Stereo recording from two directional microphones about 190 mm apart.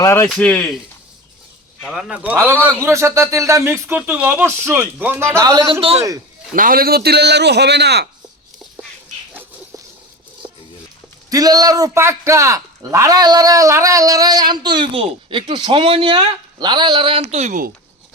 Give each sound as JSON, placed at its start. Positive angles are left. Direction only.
{"t": 0.0, "sound": "speech", "side_deg": 15}
{"t": 1.8, "sound": "a man's voice", "side_deg": 0}
{"t": 6.5, "sound": "a man's voice", "side_deg": -45}
{"t": 9.3, "sound": "a sound", "side_deg": -10}
{"t": 11.3, "sound": "a man's voice", "side_deg": -20}